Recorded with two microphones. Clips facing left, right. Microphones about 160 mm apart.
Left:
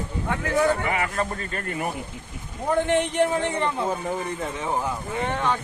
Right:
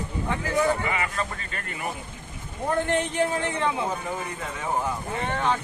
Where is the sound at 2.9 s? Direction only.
Centre (ahead or behind).